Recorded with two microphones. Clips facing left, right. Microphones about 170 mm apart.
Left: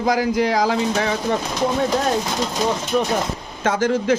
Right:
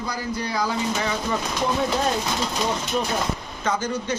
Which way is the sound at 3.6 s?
90° left.